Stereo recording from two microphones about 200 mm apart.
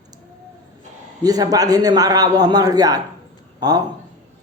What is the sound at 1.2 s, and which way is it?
A man's voice, 20° right (ahead or behind).